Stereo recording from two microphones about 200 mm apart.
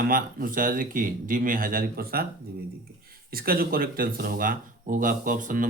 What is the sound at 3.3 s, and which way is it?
Speech, 50° right (ahead or behind).